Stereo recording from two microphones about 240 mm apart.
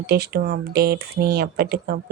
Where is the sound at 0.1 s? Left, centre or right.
Right.